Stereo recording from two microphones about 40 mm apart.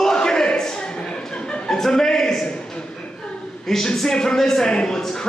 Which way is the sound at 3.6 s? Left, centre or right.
Centre.